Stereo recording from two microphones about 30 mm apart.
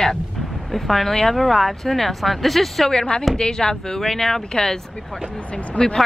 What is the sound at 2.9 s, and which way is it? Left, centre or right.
Speech, left.